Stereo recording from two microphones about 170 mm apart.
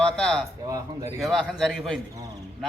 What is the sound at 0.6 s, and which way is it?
Speech, 20° right (ahead or behind).